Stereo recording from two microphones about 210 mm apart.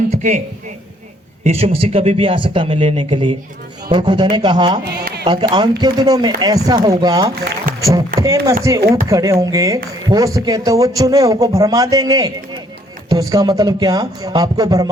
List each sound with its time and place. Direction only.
0.1 s music: 35° right (ahead or behind)
1.5 s speech: 30° right (ahead or behind)
7.7 s music: 40° right (ahead or behind)
8.2 s speech: 15° right (ahead or behind)